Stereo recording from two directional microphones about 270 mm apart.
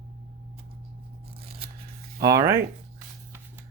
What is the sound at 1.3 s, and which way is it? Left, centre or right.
Scissors, right.